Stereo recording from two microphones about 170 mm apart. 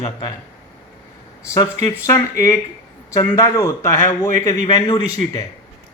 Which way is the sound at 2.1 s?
15° left (ahead or behind).